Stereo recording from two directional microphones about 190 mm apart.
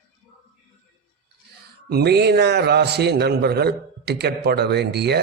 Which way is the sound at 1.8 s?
60° right (ahead or behind).